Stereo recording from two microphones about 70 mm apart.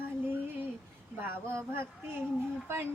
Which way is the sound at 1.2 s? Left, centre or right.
Right.